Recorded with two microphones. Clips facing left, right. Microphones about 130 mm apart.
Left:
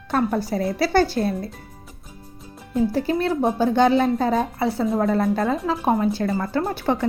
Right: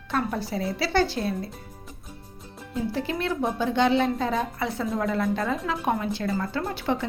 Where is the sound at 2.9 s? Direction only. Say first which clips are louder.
Left 6 dB; 40° left (ahead or behind).